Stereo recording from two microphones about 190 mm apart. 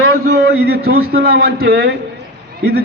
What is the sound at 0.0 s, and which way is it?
A man's voice, 55° right (ahead or behind).